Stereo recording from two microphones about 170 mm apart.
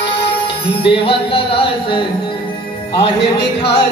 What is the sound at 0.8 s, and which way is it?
Speech, 30° left (ahead or behind).